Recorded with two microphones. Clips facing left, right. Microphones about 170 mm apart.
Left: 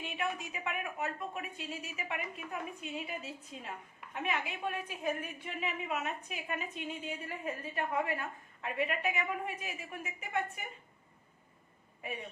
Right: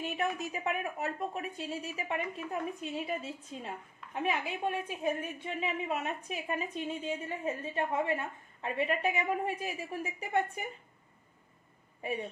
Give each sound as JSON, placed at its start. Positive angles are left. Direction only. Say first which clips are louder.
{"t": 0.0, "sound": "a woman's voice", "louder": "right 4 dB", "side_deg": -40}